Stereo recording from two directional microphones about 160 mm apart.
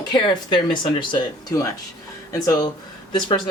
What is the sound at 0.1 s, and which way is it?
Speech, 30° left (ahead or behind).